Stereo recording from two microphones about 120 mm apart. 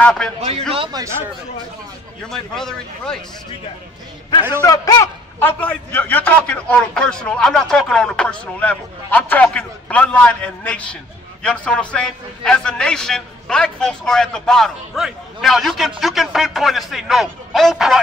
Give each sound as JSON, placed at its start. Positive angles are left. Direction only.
{"t": 0.0, "sound": "a man's voice", "side_deg": 5}
{"t": 0.4, "sound": "a man's voice", "side_deg": -60}
{"t": 1.0, "sound": "speech", "side_deg": -35}
{"t": 2.2, "sound": "a man's voice", "side_deg": 5}
{"t": 4.6, "sound": "a man's voice", "side_deg": 30}
{"t": 5.4, "sound": "a man's voice", "side_deg": 15}